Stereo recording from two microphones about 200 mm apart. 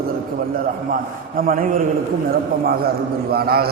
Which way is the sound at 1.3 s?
45° right (ahead or behind).